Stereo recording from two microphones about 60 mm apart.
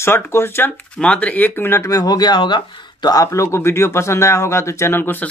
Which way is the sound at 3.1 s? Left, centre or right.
Left.